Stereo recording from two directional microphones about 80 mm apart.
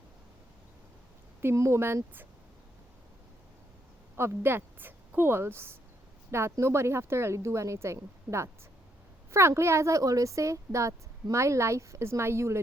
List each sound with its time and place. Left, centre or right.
1.4 s a woman's voice: right
4.2 s a woman's voice: right